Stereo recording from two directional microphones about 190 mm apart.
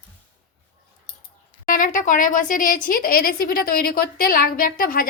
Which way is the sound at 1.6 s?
45° left (ahead or behind).